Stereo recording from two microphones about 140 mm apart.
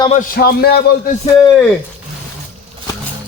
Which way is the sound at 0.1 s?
80° left.